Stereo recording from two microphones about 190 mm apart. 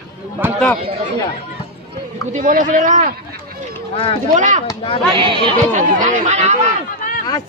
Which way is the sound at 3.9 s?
30° left (ahead or behind).